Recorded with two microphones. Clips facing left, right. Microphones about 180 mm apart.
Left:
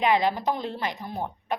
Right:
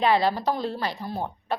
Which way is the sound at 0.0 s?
15° left (ahead or behind).